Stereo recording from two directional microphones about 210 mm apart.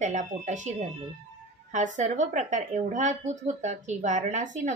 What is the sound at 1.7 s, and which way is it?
A woman's voice, 35° right (ahead or behind).